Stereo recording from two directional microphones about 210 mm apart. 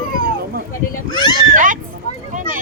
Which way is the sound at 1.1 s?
20° left (ahead or behind).